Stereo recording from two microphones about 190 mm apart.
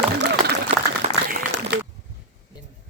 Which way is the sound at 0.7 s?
65° right (ahead or behind).